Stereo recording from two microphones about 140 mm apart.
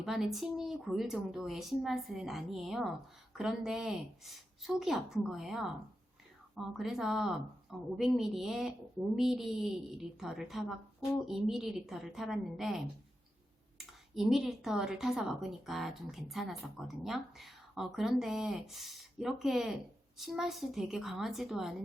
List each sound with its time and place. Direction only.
0.0 s speech: centre (ahead or behind)